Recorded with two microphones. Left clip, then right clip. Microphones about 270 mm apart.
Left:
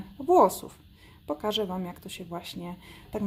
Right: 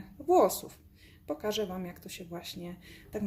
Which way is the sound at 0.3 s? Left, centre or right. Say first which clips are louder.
Left 4 dB; left.